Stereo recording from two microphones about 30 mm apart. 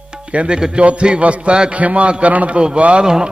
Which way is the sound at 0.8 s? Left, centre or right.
Right.